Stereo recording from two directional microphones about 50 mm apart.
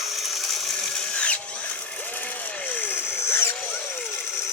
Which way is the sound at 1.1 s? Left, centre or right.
Left.